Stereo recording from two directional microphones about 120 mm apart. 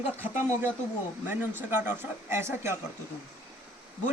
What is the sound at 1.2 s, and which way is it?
A man's voice, 20° right (ahead or behind).